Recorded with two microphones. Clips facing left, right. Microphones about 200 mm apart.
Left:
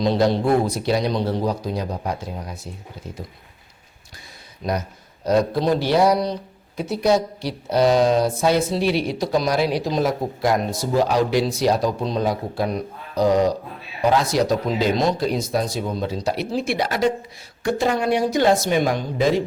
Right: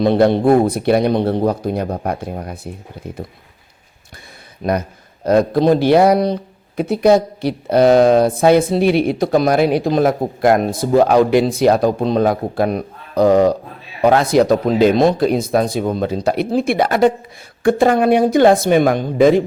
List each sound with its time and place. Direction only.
0.0 s speech: 55° right (ahead or behind)
4.6 s speech: 60° right (ahead or behind)